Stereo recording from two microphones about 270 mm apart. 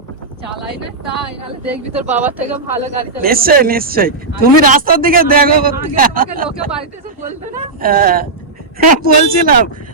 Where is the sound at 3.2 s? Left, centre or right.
Right.